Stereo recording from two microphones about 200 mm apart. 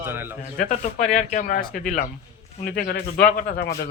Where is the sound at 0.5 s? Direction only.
40° left (ahead or behind).